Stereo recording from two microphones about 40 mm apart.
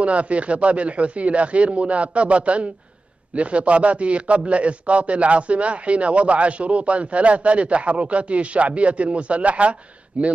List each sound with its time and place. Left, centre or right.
0.0 s a man's voice: right